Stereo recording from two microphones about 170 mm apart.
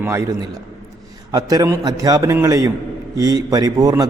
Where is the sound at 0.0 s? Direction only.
15° right (ahead or behind).